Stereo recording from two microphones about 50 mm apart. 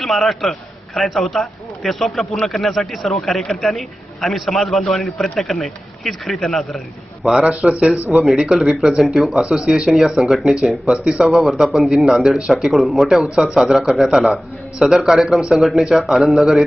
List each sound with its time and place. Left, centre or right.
0.0 s a man's voice: centre
7.2 s a man's voice: centre
8.1 s a man's voice: centre
9.4 s a man's voice: centre
10.2 s a man's voice: centre